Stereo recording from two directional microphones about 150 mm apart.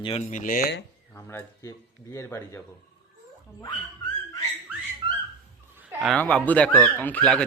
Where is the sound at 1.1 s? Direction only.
15° left (ahead or behind).